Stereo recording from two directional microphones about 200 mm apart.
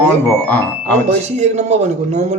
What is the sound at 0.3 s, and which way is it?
Speech, 10° left (ahead or behind).